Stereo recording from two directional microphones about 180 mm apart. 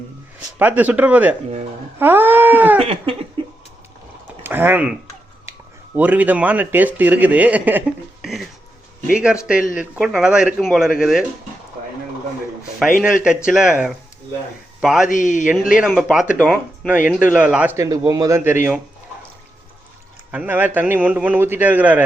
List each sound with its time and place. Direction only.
0.6 s a man's voice: 10° right (ahead or behind)
2.0 s cat: 10° right (ahead or behind)
2.7 s laughter: 30° right (ahead or behind)
4.4 s a man's voice: 10° right (ahead or behind)
13.2 s a man's voice: 5° right (ahead or behind)
15.1 s a man's voice: 45° left (ahead or behind)
15.8 s a man's voice: 5° right (ahead or behind)
20.3 s a man's voice: 10° right (ahead or behind)